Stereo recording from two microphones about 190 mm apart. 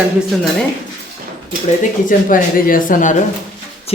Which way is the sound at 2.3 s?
45° left (ahead or behind).